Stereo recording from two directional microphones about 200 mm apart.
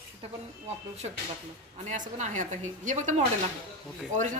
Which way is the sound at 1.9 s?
40° right (ahead or behind).